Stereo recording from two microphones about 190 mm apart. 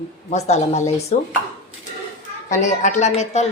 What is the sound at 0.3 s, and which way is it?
A woman's voice, 35° left (ahead or behind).